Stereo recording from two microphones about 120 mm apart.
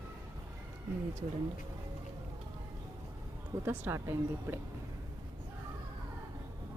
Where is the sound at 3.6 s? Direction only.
20° right (ahead or behind).